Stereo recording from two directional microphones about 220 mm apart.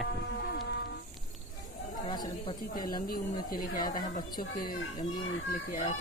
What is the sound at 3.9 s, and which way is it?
Speech, 40° left (ahead or behind).